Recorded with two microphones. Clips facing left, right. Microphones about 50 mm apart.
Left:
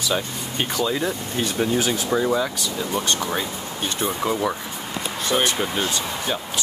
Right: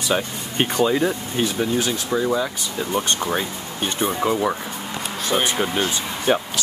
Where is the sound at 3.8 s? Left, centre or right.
Right.